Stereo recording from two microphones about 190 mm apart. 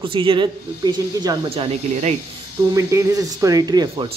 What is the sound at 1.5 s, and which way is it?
Speech, 30° right (ahead or behind).